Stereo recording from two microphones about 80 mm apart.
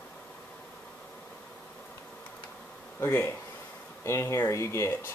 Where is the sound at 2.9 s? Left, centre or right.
Left.